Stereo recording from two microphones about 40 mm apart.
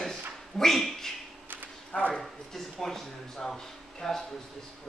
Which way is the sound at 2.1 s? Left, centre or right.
Centre.